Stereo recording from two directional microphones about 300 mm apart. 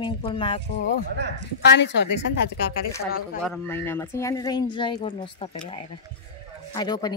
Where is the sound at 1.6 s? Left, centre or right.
Left.